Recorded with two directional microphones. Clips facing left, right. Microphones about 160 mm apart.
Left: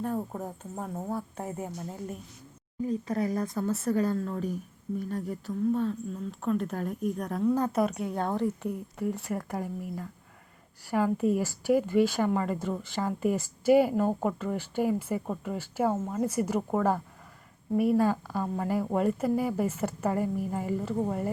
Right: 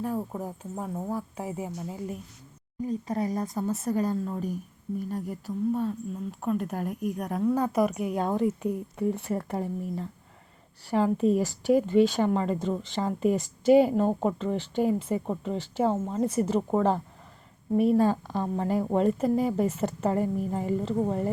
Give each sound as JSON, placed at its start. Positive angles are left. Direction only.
{"t": 0.0, "sound": "speech", "side_deg": -5}
{"t": 2.8, "sound": "speech", "side_deg": -35}
{"t": 3.6, "sound": "a woman's voice", "side_deg": -15}